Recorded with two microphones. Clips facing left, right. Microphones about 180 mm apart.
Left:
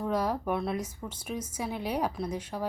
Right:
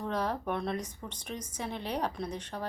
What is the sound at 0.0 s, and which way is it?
A woman's voice, 10° left (ahead or behind).